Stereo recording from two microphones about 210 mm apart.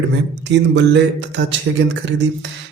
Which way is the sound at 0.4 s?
55° right (ahead or behind).